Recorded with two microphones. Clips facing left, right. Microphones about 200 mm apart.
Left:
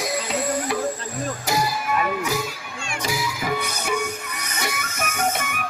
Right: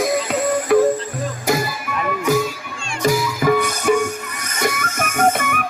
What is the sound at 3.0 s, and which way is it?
Music, 50° right (ahead or behind).